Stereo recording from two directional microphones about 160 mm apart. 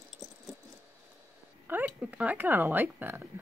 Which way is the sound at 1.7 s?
10° right (ahead or behind).